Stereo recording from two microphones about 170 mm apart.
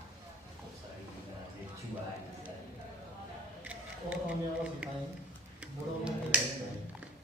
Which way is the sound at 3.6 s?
5° right (ahead or behind).